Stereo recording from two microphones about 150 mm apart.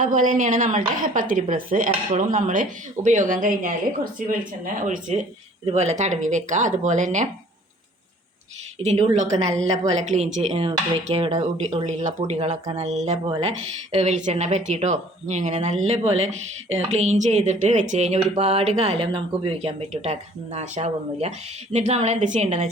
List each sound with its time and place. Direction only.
0.0 s a woman's voice: 60° right (ahead or behind)
8.8 s speech: 45° right (ahead or behind)